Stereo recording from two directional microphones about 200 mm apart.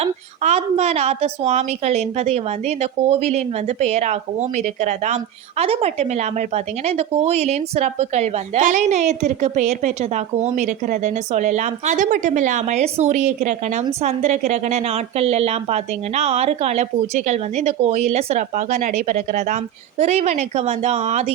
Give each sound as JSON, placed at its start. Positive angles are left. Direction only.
{"t": 0.0, "sound": "a woman's voice", "side_deg": -30}